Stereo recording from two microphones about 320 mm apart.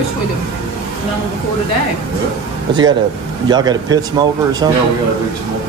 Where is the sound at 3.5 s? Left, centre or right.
Centre.